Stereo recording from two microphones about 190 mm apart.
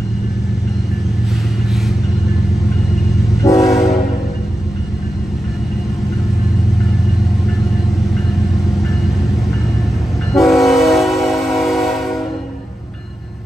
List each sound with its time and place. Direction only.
3.4 s train: 15° left (ahead or behind)
10.3 s train: centre (ahead or behind)